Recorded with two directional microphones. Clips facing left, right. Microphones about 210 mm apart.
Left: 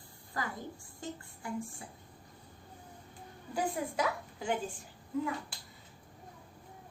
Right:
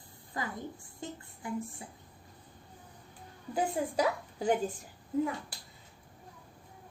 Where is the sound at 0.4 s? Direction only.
20° right (ahead or behind).